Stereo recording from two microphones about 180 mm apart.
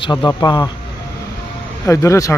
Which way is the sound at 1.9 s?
15° left (ahead or behind).